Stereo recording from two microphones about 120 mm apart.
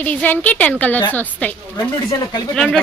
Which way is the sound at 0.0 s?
15° left (ahead or behind).